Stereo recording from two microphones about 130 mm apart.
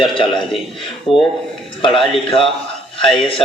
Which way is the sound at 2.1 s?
45° left (ahead or behind).